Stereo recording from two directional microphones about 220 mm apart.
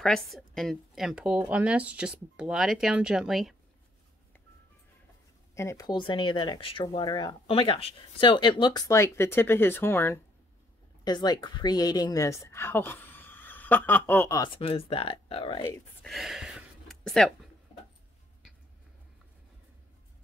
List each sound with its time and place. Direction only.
0.0 s a woman's voice: centre (ahead or behind)
5.5 s a woman's voice: 15° left (ahead or behind)
16.1 s a sound: centre (ahead or behind)